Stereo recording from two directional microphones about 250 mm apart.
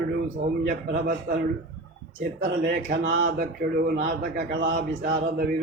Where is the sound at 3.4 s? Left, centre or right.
Right.